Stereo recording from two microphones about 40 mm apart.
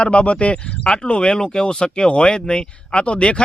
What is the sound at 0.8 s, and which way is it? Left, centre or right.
Speech, left.